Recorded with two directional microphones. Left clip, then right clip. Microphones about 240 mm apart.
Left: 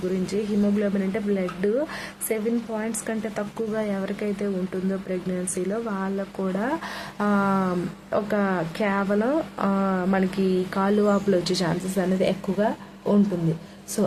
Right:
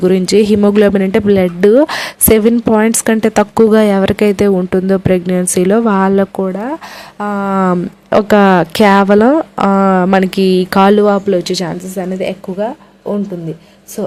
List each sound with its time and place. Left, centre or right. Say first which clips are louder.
0.3 s speech: right 17 dB; right; by 13.1 s centre